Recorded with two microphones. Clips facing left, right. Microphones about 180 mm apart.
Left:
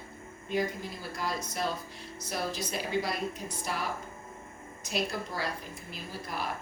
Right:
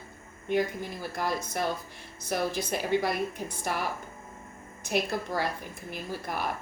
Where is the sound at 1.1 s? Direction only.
55° right (ahead or behind).